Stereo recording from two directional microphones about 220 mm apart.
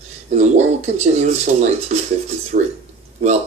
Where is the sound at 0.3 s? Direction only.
30° right (ahead or behind).